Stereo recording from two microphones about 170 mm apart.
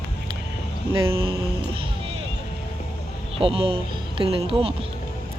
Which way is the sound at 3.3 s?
35° right (ahead or behind).